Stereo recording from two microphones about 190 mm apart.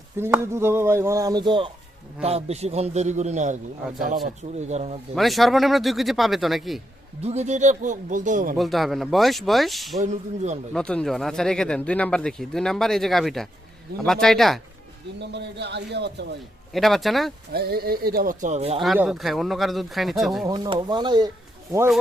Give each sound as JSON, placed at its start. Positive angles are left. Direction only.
{"t": 0.2, "sound": "a man's voice", "side_deg": -15}
{"t": 5.1, "sound": "speech", "side_deg": 0}
{"t": 7.2, "sound": "a man's voice", "side_deg": -35}
{"t": 8.5, "sound": "speech", "side_deg": 0}
{"t": 10.0, "sound": "a man's voice", "side_deg": -35}
{"t": 10.8, "sound": "speech", "side_deg": 5}
{"t": 15.2, "sound": "a man's voice", "side_deg": -65}
{"t": 16.7, "sound": "speech", "side_deg": 0}
{"t": 17.5, "sound": "speech", "side_deg": -55}
{"t": 18.8, "sound": "speech", "side_deg": 0}
{"t": 20.4, "sound": "speech", "side_deg": -20}